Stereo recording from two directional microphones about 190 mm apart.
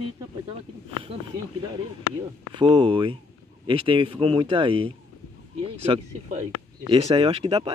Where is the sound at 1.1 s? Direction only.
30° right (ahead or behind).